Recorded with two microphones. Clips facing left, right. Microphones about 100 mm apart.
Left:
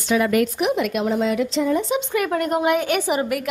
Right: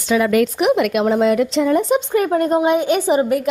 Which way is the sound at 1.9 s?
30° right (ahead or behind).